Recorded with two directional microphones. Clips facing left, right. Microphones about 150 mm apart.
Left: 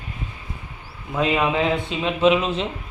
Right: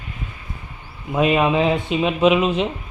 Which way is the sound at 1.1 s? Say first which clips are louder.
Right 4 dB; 20° right (ahead or behind).